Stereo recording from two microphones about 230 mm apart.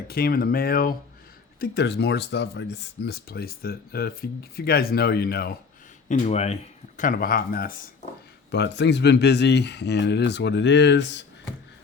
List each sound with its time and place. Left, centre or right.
0.1 s speech: left
6.1 s speech: left